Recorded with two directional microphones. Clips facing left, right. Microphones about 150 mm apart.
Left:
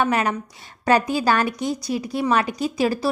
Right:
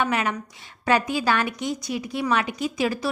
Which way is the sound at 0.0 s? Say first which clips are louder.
Left 3 dB; 40° left (ahead or behind).